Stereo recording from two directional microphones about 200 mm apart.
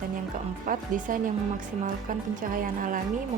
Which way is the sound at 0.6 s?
40° right (ahead or behind).